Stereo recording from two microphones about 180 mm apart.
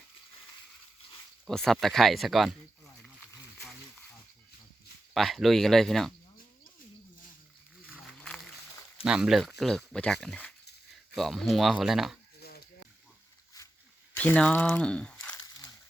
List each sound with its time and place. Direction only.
1.5 s speech: centre (ahead or behind)
3.6 s a sound: centre (ahead or behind)
5.1 s speech: centre (ahead or behind)
8.0 s a sound: 5° left (ahead or behind)
9.0 s speech: 5° right (ahead or behind)
12.4 s snake: 60° left (ahead or behind)
14.2 s speech: 10° left (ahead or behind)